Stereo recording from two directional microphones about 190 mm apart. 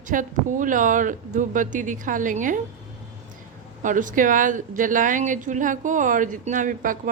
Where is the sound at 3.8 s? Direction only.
45° right (ahead or behind).